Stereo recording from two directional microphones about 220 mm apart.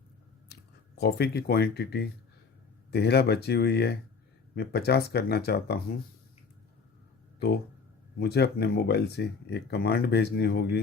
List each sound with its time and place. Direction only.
0.9 s speech: 45° left (ahead or behind)
8.2 s speech: 45° left (ahead or behind)